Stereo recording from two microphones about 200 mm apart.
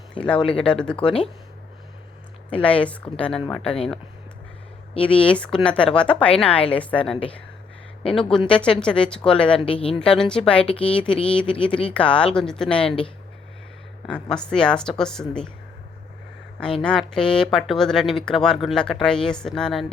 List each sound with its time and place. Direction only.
0.2 s a woman's voice: 5° left (ahead or behind)
2.5 s a woman's voice: 5° left (ahead or behind)
5.0 s a woman's voice: 5° left (ahead or behind)
9.6 s speech: 25° left (ahead or behind)
9.9 s a woman's voice: 5° left (ahead or behind)
14.1 s a woman's voice: 5° left (ahead or behind)
16.8 s a woman's voice: 5° left (ahead or behind)